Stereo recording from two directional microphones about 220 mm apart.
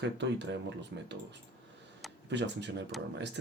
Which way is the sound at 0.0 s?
50° right (ahead or behind).